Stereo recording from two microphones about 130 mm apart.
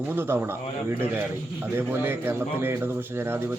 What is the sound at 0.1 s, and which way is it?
Speech, 15° right (ahead or behind).